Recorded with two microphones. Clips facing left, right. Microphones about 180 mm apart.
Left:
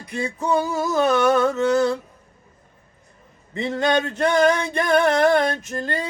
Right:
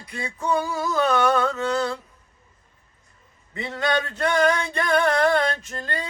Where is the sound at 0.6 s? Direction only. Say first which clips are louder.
Left 3 dB; 20° left (ahead or behind).